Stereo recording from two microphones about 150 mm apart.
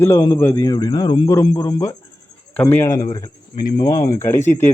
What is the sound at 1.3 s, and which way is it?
A man's voice, 20° left (ahead or behind).